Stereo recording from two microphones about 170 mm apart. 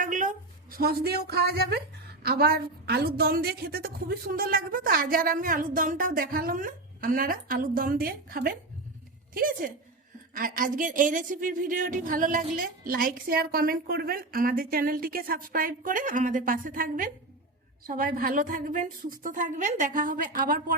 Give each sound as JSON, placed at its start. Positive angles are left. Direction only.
{"t": 0.0, "sound": "a woman's voice", "side_deg": -50}